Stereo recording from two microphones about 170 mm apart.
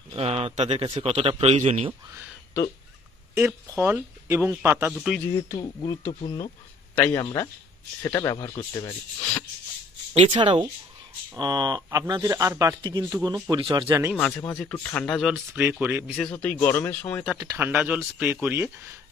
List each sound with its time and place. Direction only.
0.1 s a man's voice: 35° right (ahead or behind)
3.3 s speech: 15° right (ahead or behind)
4.9 s speech: centre (ahead or behind)
5.3 s speech: 25° left (ahead or behind)
10.3 s speech: 30° right (ahead or behind)
14.1 s speech: 10° left (ahead or behind)
15.8 s speech: 10° right (ahead or behind)
16.2 s speech: 10° left (ahead or behind)
17.4 s speech: 15° right (ahead or behind)